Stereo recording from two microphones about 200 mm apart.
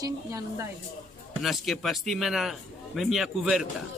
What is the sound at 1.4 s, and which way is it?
A man's voice, centre (ahead or behind).